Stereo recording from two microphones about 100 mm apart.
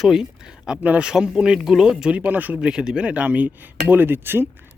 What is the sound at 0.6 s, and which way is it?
Speech, 10° right (ahead or behind).